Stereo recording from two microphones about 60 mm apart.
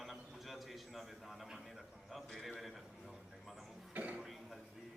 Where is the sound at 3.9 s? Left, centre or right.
Right.